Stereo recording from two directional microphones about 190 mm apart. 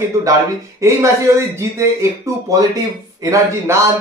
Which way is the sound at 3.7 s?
15° right (ahead or behind).